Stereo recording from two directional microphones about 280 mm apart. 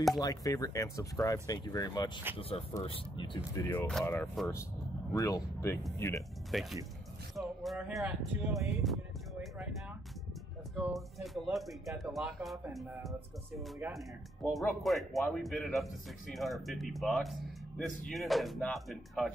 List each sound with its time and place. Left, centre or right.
0.2 s speech: centre
10.8 s speech: centre